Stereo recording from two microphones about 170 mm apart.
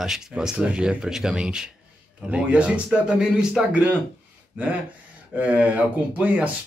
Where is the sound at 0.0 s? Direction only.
5° right (ahead or behind).